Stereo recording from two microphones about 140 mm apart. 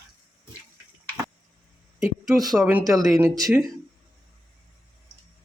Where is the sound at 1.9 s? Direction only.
5° right (ahead or behind).